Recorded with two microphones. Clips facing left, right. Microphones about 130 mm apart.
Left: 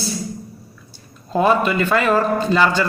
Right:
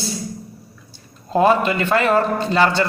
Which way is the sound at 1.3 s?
30° right (ahead or behind).